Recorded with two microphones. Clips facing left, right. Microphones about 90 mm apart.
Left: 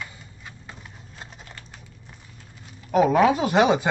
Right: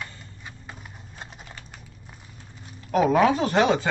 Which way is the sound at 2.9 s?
Centre (ahead or behind).